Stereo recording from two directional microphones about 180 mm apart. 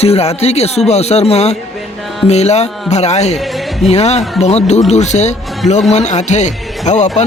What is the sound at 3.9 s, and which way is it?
A man's voice, 35° left (ahead or behind).